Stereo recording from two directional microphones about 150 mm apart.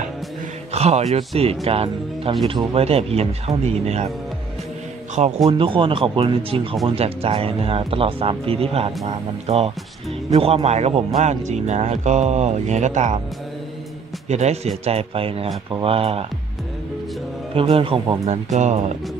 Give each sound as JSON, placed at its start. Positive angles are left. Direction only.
{"t": 0.7, "sound": "speech", "side_deg": -45}
{"t": 5.1, "sound": "speech", "side_deg": -45}
{"t": 14.3, "sound": "speech", "side_deg": -45}
{"t": 17.6, "sound": "speech", "side_deg": -35}